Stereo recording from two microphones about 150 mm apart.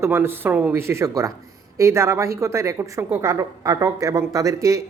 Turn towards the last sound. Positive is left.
turn(degrees=-20)  # may be behind; listen again after turning